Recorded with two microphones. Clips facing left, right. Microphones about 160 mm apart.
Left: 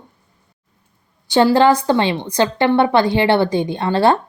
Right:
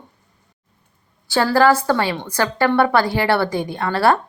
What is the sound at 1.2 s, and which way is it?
Speech, 20° left (ahead or behind).